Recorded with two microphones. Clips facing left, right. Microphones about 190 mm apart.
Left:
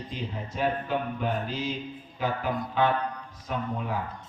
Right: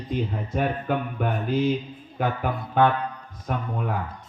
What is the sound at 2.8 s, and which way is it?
Speech, 55° right (ahead or behind).